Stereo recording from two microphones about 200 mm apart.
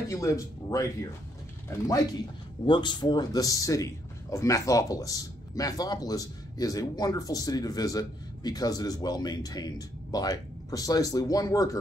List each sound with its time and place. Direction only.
0.1 s speech: 15° left (ahead or behind)
1.9 s speech: 20° left (ahead or behind)